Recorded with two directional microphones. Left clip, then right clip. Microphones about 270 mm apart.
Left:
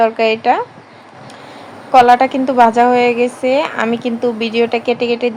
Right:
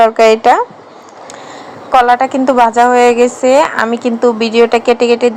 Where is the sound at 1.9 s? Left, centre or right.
Centre.